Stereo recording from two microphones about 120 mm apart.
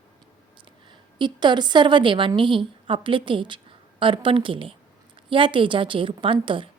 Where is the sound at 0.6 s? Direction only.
40° right (ahead or behind).